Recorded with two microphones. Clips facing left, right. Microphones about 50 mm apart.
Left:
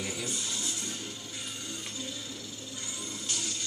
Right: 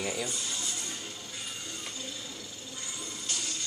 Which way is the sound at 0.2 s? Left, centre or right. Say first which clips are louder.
Right 1 dB; centre.